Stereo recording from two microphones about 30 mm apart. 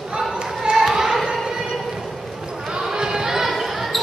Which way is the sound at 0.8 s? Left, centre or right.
Centre.